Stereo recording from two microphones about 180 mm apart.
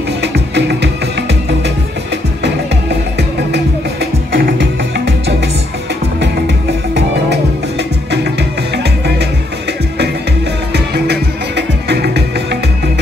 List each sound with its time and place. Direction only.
0.2 s music: 70° right (ahead or behind)
3.2 s music: 70° right (ahead or behind)
10.7 s music: 65° right (ahead or behind)